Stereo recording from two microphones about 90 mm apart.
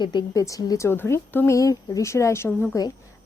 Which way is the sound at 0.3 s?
40° left (ahead or behind).